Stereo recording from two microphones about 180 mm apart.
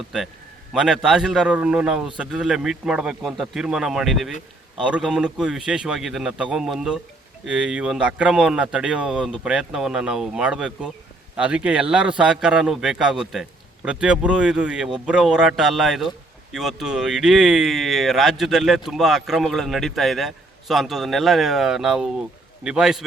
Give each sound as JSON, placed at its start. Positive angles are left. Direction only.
{"t": 0.7, "sound": "speech", "side_deg": -5}